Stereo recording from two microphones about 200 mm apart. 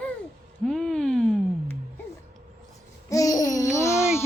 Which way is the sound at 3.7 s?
15° left (ahead or behind).